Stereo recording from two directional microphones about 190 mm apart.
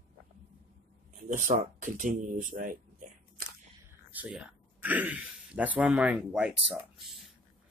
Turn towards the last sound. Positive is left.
turn(degrees=0)  # may be behind; listen again after turning